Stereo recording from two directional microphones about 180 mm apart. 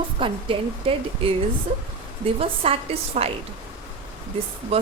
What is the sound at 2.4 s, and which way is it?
Speech, 30° right (ahead or behind).